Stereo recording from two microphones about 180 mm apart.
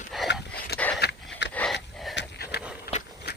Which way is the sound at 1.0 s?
75° left (ahead or behind).